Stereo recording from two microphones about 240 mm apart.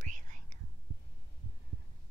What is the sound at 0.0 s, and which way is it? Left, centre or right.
Whispering, right.